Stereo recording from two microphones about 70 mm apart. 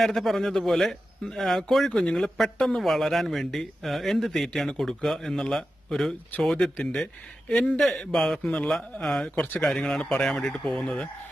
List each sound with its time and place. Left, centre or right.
0.0 s a man's voice: centre
7.7 s speech: centre
9.3 s speech: centre
9.6 s speech: centre